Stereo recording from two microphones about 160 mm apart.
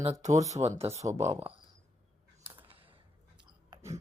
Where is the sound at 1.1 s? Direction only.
15° right (ahead or behind).